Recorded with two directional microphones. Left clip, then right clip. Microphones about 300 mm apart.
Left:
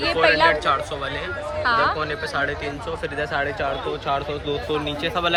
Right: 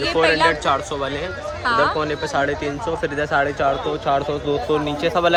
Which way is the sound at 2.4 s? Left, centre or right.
Right.